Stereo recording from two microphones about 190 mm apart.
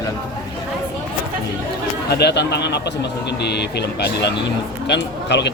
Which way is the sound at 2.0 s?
60° left (ahead or behind).